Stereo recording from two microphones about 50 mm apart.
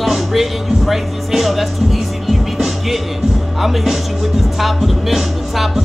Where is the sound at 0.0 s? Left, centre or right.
Centre.